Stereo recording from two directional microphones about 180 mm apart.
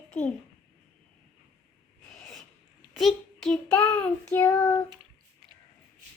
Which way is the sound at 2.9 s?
Centre (ahead or behind).